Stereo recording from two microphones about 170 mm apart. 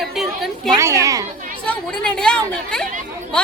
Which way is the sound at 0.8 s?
15° right (ahead or behind).